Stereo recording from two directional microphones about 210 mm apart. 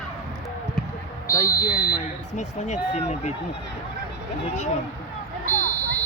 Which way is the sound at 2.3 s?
35° left (ahead or behind).